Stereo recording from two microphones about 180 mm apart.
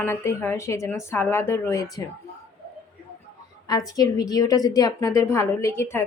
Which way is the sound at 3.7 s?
20° left (ahead or behind).